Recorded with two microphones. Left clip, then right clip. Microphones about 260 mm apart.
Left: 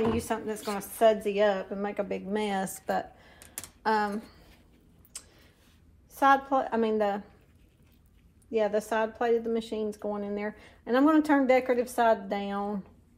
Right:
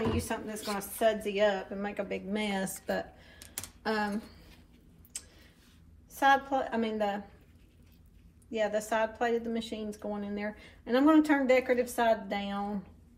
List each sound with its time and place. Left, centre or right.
0.0 s a woman's voice: left
2.9 s a sound: centre
3.8 s speech: centre
6.1 s a woman's voice: left
8.5 s a woman's voice: left